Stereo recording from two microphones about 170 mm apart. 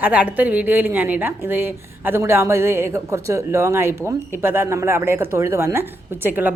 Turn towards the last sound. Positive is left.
turn(degrees=-10)  # may be behind; listen again after turning